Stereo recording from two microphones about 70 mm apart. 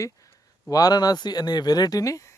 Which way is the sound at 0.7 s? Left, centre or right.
Left.